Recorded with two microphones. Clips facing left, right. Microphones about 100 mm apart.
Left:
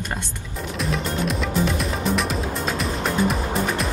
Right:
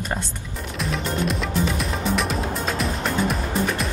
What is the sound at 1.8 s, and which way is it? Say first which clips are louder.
Music: left 1 dB; centre (ahead or behind).